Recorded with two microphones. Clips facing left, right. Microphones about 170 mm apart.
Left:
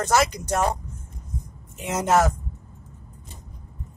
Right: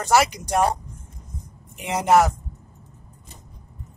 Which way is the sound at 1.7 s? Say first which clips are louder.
Right 3 dB; 15° right (ahead or behind).